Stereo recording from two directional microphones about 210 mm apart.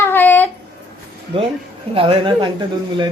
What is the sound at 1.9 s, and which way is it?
Speech, 25° right (ahead or behind).